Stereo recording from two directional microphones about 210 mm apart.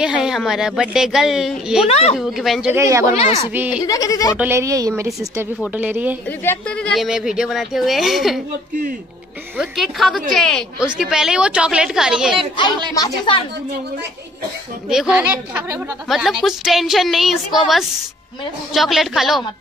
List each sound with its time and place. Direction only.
0.0 s a woman's voice: 5° right (ahead or behind)
1.9 s speech: 30° left (ahead or behind)
2.1 s a woman's voice: centre (ahead or behind)
2.7 s a woman's voice: 15° right (ahead or behind)
3.1 s speech: 30° left (ahead or behind)
3.5 s a woman's voice: 10° right (ahead or behind)
3.8 s speech: 15° left (ahead or behind)
4.4 s a woman's voice: 10° right (ahead or behind)
6.2 s a woman's voice: 10° left (ahead or behind)
9.6 s a woman's voice: centre (ahead or behind)
12.9 s speech: 20° left (ahead or behind)
14.9 s a woman's voice: 5° right (ahead or behind)
18.7 s a woman's voice: centre (ahead or behind)